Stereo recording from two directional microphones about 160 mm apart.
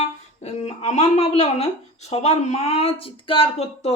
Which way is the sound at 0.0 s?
40° left (ahead or behind).